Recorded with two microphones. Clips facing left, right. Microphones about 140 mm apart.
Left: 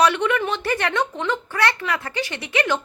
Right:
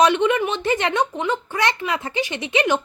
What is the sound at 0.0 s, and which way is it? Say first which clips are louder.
A woman's voice: right 2 dB; 20° right (ahead or behind).